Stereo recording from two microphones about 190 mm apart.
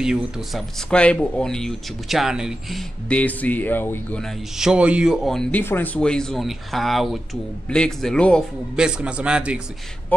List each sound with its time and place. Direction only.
0.0 s speech: centre (ahead or behind)